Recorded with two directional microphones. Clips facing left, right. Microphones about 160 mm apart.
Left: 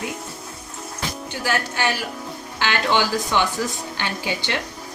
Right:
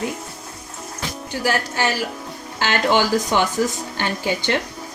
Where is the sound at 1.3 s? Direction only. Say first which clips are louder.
Right 3 dB; 40° right (ahead or behind).